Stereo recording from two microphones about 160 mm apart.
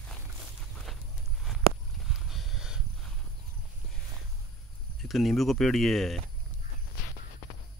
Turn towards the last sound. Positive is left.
turn(degrees=0)  # may be behind; listen again after turning